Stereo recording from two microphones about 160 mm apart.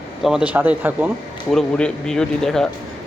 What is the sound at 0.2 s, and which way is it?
Speech, 5° right (ahead or behind).